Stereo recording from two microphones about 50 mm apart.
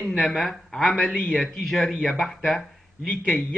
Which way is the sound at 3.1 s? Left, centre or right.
Left.